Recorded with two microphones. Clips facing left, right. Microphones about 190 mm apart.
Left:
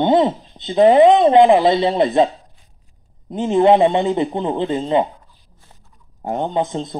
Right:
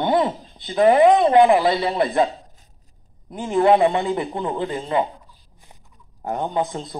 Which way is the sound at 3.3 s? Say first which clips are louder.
Left 3 dB; 20° left (ahead or behind).